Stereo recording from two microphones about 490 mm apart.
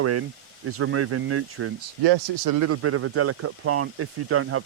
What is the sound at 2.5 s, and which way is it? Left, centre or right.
Speech, right.